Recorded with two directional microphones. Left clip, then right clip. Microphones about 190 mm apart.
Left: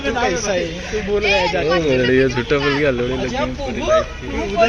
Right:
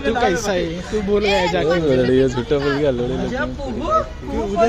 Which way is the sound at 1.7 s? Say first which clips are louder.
Left 1 dB; 15° right (ahead or behind).